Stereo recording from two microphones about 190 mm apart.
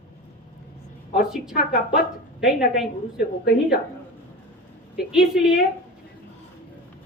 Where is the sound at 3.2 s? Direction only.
55° left (ahead or behind).